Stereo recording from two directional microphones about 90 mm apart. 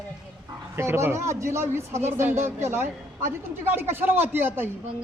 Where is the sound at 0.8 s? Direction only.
30° right (ahead or behind).